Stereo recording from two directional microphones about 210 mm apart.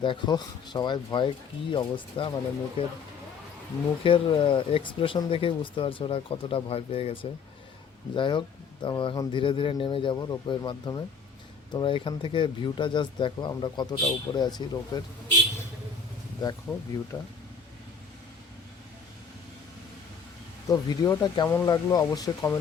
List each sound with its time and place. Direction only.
0.0 s speech: 20° left (ahead or behind)
4.0 s speech: 25° left (ahead or behind)
16.4 s speech: 20° left (ahead or behind)
20.7 s speech: 15° left (ahead or behind)